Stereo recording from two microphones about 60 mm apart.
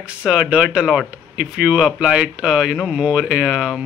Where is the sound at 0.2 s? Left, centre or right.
Centre.